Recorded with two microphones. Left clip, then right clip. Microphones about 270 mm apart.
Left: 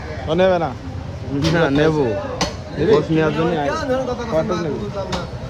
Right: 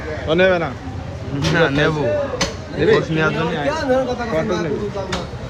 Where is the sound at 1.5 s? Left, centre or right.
Left.